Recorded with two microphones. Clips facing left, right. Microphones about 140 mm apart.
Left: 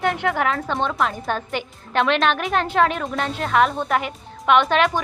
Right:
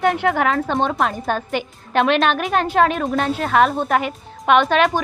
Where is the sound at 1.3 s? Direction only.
15° right (ahead or behind).